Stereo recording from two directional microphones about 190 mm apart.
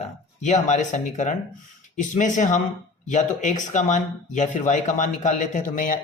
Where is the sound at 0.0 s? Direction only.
35° left (ahead or behind).